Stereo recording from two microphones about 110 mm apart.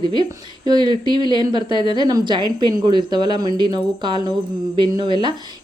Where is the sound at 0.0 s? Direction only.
40° right (ahead or behind).